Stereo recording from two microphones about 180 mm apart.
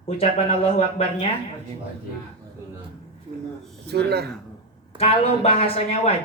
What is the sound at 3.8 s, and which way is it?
Speech, 65° right (ahead or behind).